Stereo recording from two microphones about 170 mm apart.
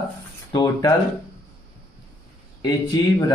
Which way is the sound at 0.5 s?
25° left (ahead or behind).